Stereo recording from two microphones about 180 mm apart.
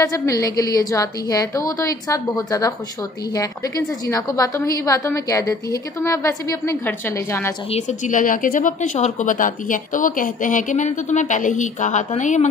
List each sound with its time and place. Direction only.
0.0 s a woman's voice: 20° left (ahead or behind)
7.7 s a woman's voice: 45° left (ahead or behind)